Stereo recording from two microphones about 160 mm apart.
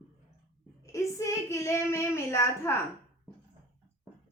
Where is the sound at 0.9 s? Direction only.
20° left (ahead or behind).